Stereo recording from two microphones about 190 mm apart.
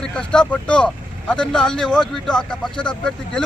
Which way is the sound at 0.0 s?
5° left (ahead or behind).